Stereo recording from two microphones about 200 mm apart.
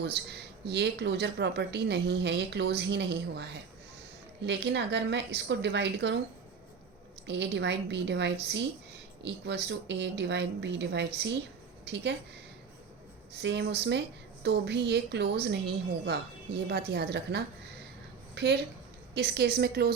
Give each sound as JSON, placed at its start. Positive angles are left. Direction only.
{"t": 0.0, "sound": "speech", "side_deg": -55}
{"t": 7.3, "sound": "speech", "side_deg": -60}
{"t": 13.3, "sound": "a woman's voice", "side_deg": -60}